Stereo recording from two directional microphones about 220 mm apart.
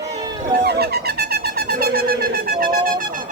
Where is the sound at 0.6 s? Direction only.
45° right (ahead or behind).